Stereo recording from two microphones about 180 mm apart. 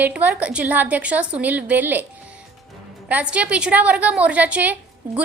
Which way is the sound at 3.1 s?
5° right (ahead or behind).